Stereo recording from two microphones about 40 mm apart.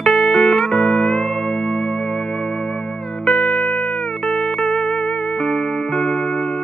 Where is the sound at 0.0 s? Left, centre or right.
Centre.